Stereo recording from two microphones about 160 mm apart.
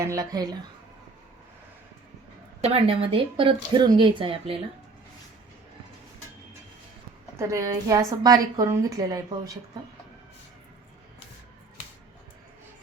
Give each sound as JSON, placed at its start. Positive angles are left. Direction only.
{"t": 0.0, "sound": "a woman's voice", "side_deg": -20}
{"t": 2.6, "sound": "speech", "side_deg": -40}
{"t": 7.3, "sound": "a woman's voice", "side_deg": -20}